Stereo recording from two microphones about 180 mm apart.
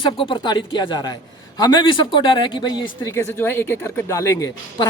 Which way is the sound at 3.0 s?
15° left (ahead or behind).